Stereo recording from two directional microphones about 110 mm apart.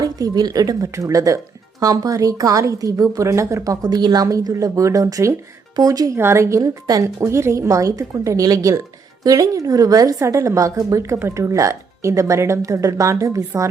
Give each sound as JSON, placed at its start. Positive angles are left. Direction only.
{"t": 0.0, "sound": "speech", "side_deg": -35}
{"t": 3.8, "sound": "speech", "side_deg": -40}
{"t": 6.1, "sound": "a woman's voice", "side_deg": -25}